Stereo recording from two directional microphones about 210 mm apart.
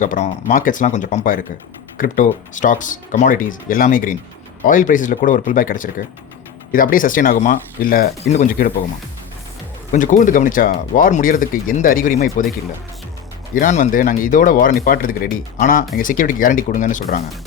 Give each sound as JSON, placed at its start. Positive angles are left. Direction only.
{"t": 0.0, "sound": "speech", "side_deg": 35}
{"t": 8.2, "sound": "speech", "side_deg": 30}
{"t": 9.9, "sound": "speech", "side_deg": 40}
{"t": 13.5, "sound": "speech", "side_deg": 35}